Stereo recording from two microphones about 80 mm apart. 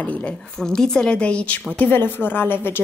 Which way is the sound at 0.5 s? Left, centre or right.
Centre.